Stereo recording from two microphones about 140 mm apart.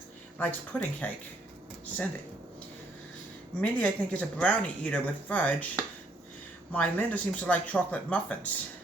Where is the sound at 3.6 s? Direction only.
10° left (ahead or behind).